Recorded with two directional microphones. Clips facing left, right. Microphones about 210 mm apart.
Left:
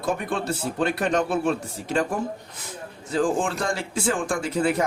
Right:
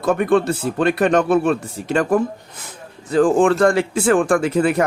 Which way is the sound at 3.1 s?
60° right (ahead or behind).